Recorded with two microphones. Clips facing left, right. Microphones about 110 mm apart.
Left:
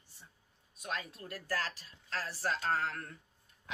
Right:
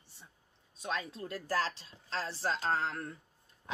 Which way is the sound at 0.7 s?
25° right (ahead or behind).